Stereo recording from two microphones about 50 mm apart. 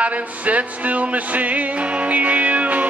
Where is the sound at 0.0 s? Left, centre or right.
Right.